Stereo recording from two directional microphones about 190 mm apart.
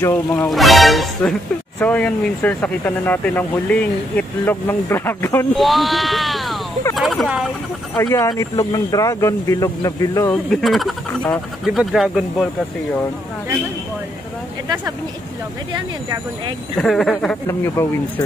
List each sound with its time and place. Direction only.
0.0 s speech: 10° left (ahead or behind)
5.6 s speech: centre (ahead or behind)
7.9 s speech: 10° left (ahead or behind)
10.5 s speech: centre (ahead or behind)
16.7 s speech: centre (ahead or behind)